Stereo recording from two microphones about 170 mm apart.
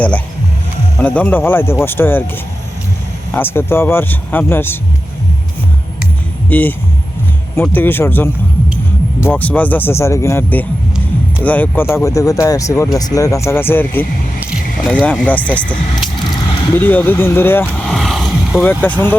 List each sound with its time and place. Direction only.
0.9 s speech: 10° left (ahead or behind)
3.3 s speech: 10° left (ahead or behind)
6.5 s speech: 10° left (ahead or behind)
14.5 s a sound: 5° right (ahead or behind)
15.0 s speech: 10° left (ahead or behind)
16.7 s speech: 10° left (ahead or behind)
17.8 s vehicle: centre (ahead or behind)
18.7 s speech: 10° left (ahead or behind)